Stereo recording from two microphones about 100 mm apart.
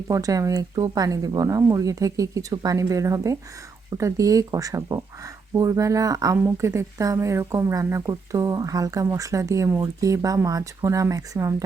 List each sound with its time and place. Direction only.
0.1 s a woman's voice: 35° right (ahead or behind)
6.3 s a woman's voice: 25° right (ahead or behind)